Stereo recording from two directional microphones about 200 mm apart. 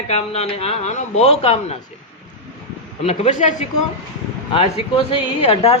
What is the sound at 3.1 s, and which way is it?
Speech, 35° left (ahead or behind).